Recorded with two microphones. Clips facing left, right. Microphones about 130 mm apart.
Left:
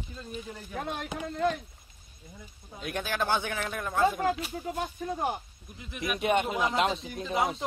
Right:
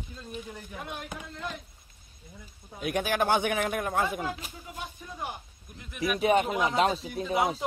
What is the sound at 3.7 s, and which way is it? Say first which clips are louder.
Speech: right 4 dB; 55° right (ahead or behind).